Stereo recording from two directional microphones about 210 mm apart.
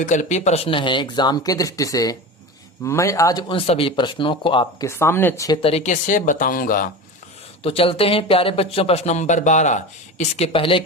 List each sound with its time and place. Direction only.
0.0 s speech: 35° left (ahead or behind); by 5.5 s 15° left (ahead or behind)
5.6 s speech: 30° left (ahead or behind)
7.6 s speech: 25° left (ahead or behind)